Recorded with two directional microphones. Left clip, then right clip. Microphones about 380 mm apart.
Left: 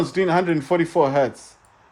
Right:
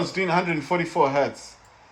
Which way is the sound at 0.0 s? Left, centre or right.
Left.